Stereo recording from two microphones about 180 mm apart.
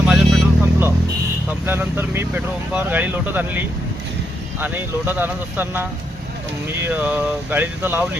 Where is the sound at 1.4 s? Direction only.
10° right (ahead or behind).